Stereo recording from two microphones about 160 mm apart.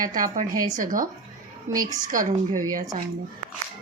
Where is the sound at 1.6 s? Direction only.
25° right (ahead or behind).